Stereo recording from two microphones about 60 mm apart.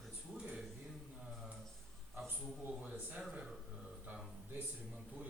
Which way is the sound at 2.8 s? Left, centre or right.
Centre.